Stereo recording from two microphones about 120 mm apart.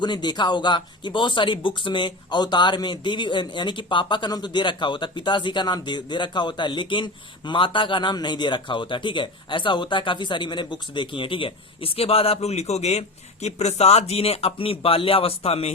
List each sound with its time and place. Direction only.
0.0 s speech: 35° left (ahead or behind); by 15.7 s 55° left (ahead or behind)